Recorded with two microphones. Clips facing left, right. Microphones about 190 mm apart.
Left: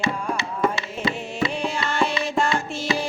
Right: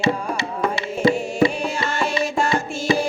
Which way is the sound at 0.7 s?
50° right (ahead or behind).